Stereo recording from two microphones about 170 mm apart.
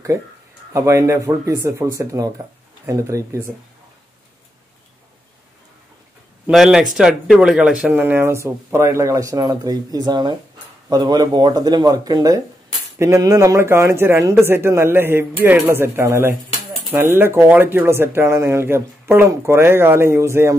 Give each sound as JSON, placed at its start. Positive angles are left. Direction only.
{"t": 0.7, "sound": "speech", "side_deg": -15}
{"t": 6.4, "sound": "speech", "side_deg": -5}